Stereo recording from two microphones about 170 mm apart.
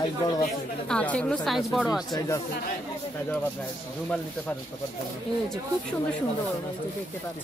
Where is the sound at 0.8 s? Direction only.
5° left (ahead or behind).